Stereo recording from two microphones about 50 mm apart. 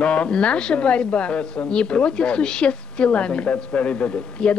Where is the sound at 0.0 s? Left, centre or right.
Left.